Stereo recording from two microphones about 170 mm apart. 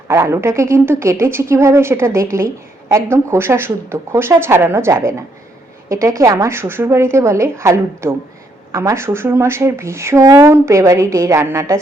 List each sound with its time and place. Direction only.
0.1 s speech: 15° right (ahead or behind)